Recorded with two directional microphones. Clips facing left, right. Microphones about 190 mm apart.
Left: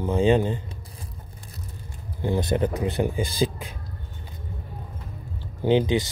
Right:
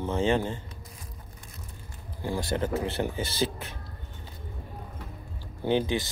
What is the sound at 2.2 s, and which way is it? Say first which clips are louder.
Speech: left 6 dB; 20° left (ahead or behind).